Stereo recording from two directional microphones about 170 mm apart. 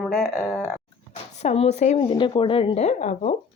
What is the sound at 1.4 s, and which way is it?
A woman's voice, 40° left (ahead or behind).